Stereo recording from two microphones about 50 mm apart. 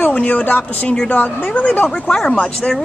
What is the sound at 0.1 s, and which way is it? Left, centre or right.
A woman's voice, left.